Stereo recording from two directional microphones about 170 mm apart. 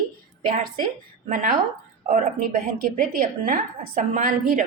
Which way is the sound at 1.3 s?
50° right (ahead or behind).